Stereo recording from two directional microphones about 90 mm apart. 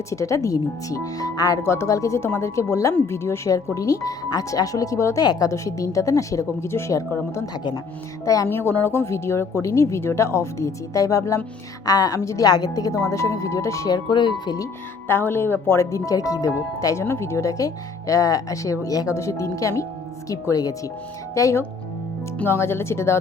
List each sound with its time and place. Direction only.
0.1 s speech: 35° left (ahead or behind)
5.2 s speech: 50° left (ahead or behind)
5.5 s speech: 35° left (ahead or behind)
8.4 s speech: 25° left (ahead or behind)
12.5 s speech: 45° left (ahead or behind)
14.1 s speech: 55° left (ahead or behind)
15.0 s speech: 25° left (ahead or behind)